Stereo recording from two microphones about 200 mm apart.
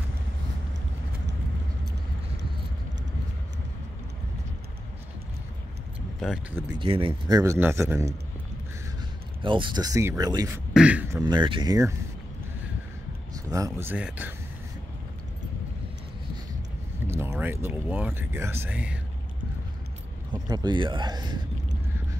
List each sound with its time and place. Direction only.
6.2 s speech: 5° right (ahead or behind)
6.8 s speech: 25° right (ahead or behind)
9.4 s speech: 25° right (ahead or behind)
10.7 s speech: 5° right (ahead or behind)
11.2 s speech: 25° right (ahead or behind)
13.5 s speech: 15° right (ahead or behind)
17.0 s speech: 10° right (ahead or behind)
20.4 s speech: 20° right (ahead or behind)